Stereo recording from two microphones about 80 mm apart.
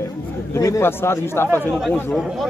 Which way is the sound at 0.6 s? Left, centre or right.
Left.